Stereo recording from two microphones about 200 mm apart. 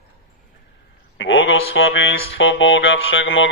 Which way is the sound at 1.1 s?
70° left (ahead or behind).